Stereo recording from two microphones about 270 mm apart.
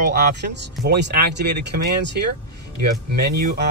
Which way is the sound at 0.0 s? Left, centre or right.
Right.